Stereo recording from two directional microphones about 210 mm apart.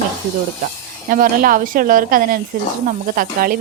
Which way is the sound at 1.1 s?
40° right (ahead or behind).